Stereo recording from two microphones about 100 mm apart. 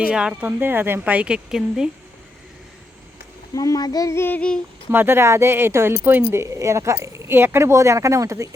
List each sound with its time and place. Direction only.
0.1 s speech: 10° right (ahead or behind)
3.5 s child singing: 35° left (ahead or behind)
4.4 s humming: 10° left (ahead or behind)
4.9 s speech: 20° right (ahead or behind)